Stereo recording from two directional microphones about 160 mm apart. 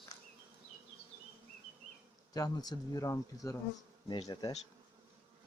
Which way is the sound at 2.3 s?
25° left (ahead or behind).